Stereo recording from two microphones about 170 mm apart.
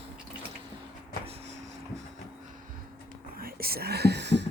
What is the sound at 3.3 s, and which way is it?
Whispering, 60° right (ahead or behind).